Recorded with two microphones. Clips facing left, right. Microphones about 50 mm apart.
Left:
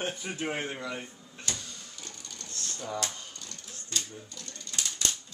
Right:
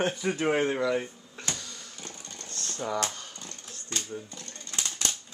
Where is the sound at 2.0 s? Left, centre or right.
Right.